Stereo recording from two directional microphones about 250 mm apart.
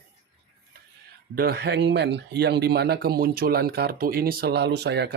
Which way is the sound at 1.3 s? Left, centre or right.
Right.